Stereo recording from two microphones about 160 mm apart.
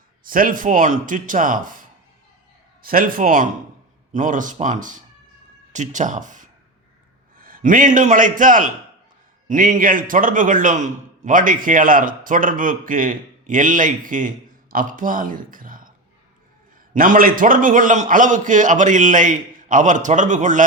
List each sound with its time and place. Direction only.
0.3 s a man's voice: 60° right (ahead or behind)
2.8 s a man's voice: 65° right (ahead or behind)
16.9 s a man's voice: 60° right (ahead or behind)